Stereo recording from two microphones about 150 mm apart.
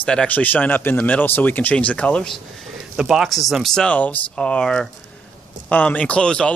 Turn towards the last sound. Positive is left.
turn(degrees=5)  # may be behind; listen again after turning